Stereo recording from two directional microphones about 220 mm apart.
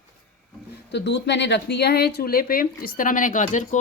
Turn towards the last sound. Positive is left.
turn(degrees=35)  # may be behind; listen again after turning